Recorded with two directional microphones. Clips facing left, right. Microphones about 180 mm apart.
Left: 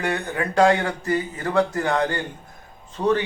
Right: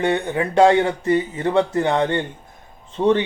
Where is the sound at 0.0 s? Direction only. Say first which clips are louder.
Right 5 dB; 25° right (ahead or behind).